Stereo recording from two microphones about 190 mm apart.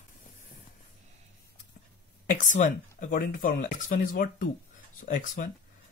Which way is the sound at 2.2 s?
40° left (ahead or behind).